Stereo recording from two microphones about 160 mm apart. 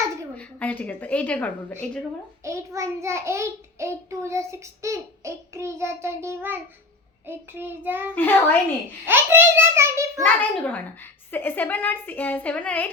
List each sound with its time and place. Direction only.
0.3 s a woman's voice: 10° left (ahead or behind)
2.4 s child singing: 20° right (ahead or behind)
8.1 s a child's voice: 10° left (ahead or behind)
9.0 s child singing: 15° right (ahead or behind)
10.2 s a child's voice: 10° left (ahead or behind)